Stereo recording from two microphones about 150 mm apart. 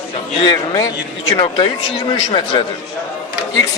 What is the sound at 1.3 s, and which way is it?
Speech, 35° left (ahead or behind).